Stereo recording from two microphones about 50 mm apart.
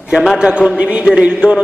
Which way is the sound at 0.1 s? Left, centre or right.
Centre.